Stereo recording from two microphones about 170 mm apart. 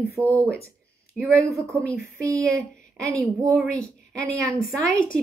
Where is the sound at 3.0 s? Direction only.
20° right (ahead or behind).